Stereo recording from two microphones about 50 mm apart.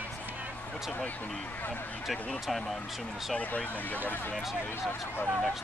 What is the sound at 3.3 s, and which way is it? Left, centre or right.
Speech, left.